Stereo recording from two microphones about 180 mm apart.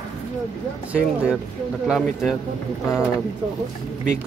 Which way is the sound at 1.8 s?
Centre (ahead or behind).